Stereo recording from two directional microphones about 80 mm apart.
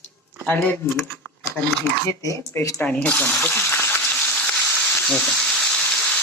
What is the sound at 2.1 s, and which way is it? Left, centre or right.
Speech, left.